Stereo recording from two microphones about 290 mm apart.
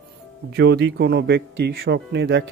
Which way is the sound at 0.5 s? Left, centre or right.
Right.